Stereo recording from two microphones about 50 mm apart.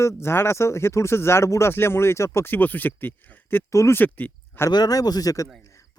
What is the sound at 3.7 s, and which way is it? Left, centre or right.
Speech, left.